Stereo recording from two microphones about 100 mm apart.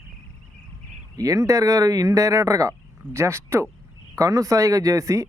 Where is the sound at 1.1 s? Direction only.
35° right (ahead or behind).